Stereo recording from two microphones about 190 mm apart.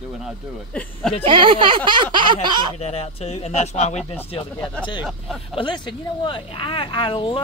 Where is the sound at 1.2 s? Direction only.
25° right (ahead or behind).